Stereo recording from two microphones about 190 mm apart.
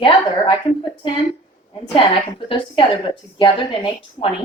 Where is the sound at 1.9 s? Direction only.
25° left (ahead or behind).